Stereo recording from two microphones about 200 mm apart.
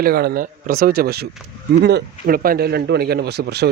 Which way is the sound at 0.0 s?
50° right (ahead or behind).